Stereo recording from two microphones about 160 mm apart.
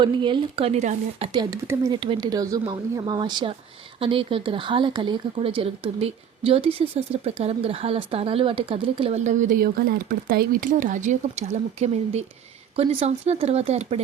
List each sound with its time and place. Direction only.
0.0 s speech: 30° right (ahead or behind)
1.3 s speech: 25° right (ahead or behind)
2.0 s speech: 30° right (ahead or behind)